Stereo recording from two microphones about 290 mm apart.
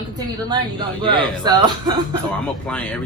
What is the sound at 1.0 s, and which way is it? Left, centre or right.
Speech, centre.